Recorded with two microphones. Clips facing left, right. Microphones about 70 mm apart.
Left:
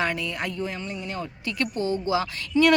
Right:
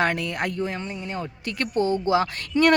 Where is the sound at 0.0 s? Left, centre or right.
Right.